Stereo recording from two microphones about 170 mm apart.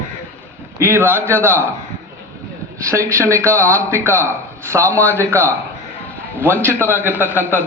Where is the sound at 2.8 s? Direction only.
15° right (ahead or behind).